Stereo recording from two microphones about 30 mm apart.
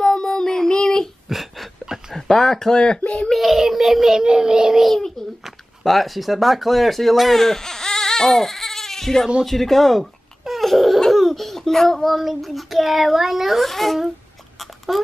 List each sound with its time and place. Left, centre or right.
0.0 s child singing: centre
1.3 s a sound: centre
2.2 s speech: centre
2.7 s speech: left
3.3 s child singing: centre
4.2 s child singing: right
5.2 s babbling: centre
5.9 s speech: centre
10.6 s laughter: centre
11.1 s speech: centre